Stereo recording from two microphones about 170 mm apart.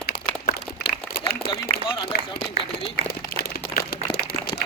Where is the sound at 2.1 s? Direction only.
60° left (ahead or behind).